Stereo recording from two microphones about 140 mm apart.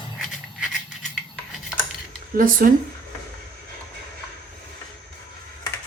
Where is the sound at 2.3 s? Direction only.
90° right.